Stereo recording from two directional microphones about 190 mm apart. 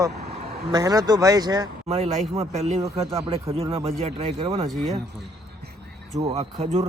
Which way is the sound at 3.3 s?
30° right (ahead or behind).